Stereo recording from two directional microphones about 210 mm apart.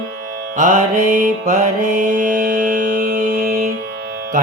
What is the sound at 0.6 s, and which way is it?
Music, 35° right (ahead or behind).